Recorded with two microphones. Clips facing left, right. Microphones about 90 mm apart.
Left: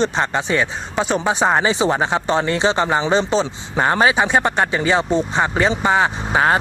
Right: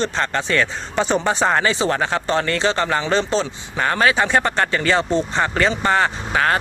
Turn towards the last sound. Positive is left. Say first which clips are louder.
# left 2 dB
turn(degrees=25)  # may be behind; listen again after turning